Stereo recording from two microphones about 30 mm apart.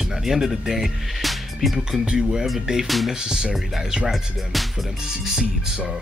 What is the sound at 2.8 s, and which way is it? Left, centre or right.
Music, centre.